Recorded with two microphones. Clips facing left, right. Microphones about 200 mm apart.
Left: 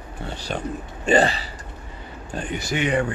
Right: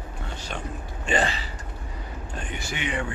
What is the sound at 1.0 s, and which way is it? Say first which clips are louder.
Speech: left 7 dB; 35° left (ahead or behind).